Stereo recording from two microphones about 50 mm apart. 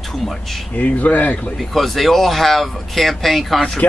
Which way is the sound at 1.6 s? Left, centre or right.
Centre.